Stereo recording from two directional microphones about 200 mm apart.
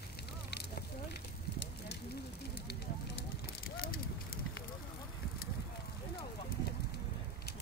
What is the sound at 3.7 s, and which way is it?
Fire, 50° left (ahead or behind).